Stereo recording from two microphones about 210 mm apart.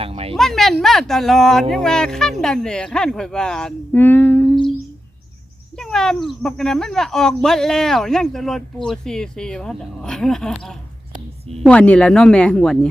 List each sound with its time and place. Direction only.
0.0 s speech: 25° right (ahead or behind)
0.3 s speech: centre (ahead or behind)
5.7 s speech: 5° left (ahead or behind)